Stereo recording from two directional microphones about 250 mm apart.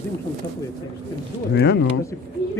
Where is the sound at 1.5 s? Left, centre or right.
Left.